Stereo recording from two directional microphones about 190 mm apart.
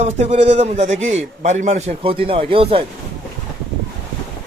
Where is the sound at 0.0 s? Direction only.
35° right (ahead or behind).